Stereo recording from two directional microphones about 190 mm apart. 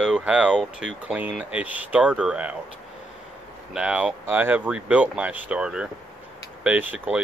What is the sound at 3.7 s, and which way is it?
Speech, 5° right (ahead or behind).